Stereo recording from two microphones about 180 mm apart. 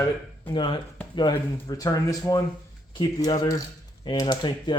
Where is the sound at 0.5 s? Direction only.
25° left (ahead or behind).